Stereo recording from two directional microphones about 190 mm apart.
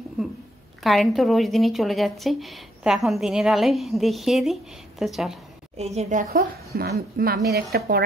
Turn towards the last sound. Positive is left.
turn(degrees=-55)  # may be behind; listen again after turning